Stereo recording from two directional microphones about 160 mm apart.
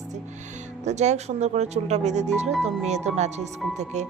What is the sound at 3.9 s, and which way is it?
Speech, 45° right (ahead or behind).